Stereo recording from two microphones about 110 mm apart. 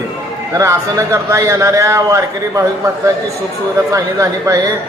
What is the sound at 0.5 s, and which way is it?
A man's voice, 30° right (ahead or behind).